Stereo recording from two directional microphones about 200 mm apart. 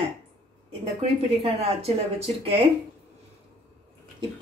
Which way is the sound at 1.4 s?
30° right (ahead or behind).